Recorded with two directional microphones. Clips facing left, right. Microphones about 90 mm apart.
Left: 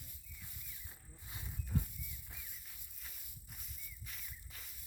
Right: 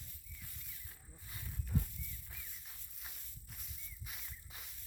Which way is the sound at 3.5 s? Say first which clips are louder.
Even; centre (ahead or behind).